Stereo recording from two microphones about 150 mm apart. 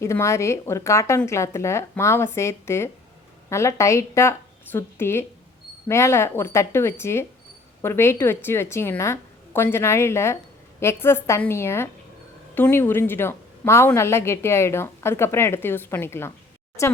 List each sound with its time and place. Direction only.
0.0 s a woman's voice: 20° left (ahead or behind)